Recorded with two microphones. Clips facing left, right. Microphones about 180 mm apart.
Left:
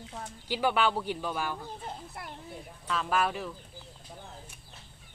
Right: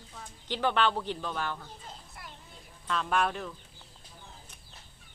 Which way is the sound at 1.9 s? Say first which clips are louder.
Left 7 dB; 60° left (ahead or behind).